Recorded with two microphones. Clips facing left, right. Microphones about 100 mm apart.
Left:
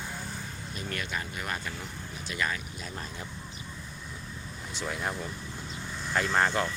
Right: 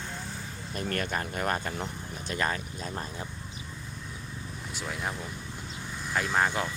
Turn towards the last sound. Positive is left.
turn(degrees=-5)  # may be behind; listen again after turning